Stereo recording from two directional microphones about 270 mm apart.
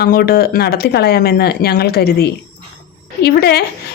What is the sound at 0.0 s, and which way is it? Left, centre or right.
A woman's voice, left.